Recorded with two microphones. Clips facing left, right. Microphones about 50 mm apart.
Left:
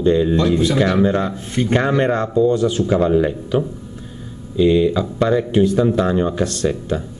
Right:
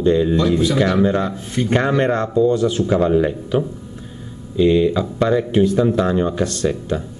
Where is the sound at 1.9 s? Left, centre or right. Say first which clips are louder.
Even; centre.